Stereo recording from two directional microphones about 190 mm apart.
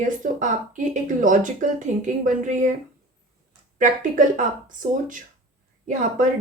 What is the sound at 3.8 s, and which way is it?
A woman's voice, 40° right (ahead or behind).